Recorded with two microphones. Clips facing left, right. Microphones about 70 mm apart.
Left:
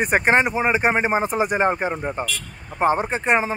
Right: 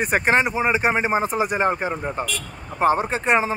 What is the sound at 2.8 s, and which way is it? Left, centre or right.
Speech, left.